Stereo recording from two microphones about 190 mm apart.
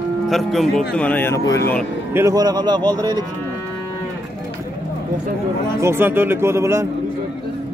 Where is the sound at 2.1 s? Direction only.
15° right (ahead or behind).